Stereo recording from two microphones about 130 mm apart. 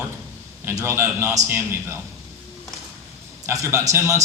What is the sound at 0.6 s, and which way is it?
A man's voice, 20° right (ahead or behind).